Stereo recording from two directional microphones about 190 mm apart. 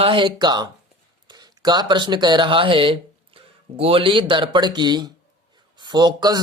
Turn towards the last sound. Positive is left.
turn(degrees=-20)  # may be behind; listen again after turning